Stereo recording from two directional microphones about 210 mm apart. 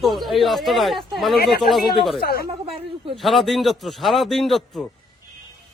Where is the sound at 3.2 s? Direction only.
Centre (ahead or behind).